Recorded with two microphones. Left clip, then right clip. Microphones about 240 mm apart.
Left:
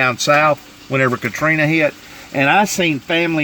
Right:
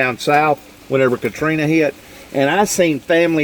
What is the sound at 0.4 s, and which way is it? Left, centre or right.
Speech, left.